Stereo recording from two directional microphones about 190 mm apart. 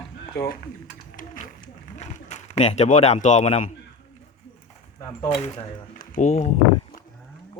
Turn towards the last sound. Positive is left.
turn(degrees=40)  # may be behind; listen again after turning